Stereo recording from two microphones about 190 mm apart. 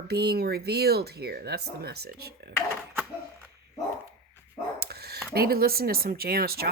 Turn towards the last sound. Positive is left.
turn(degrees=-55)  # may be behind; listen again after turning